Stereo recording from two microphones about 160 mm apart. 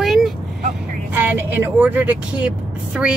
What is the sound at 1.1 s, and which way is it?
Speech, 10° right (ahead or behind).